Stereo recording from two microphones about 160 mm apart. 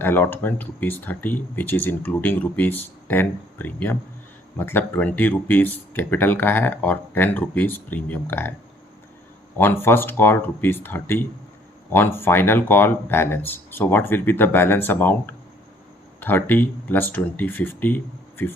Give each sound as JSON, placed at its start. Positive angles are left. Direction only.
{"t": 0.0, "sound": "speech", "side_deg": 15}
{"t": 9.6, "sound": "speech", "side_deg": 15}